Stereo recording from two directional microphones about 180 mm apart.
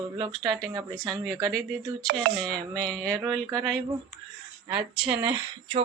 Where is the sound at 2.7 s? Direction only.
5° left (ahead or behind).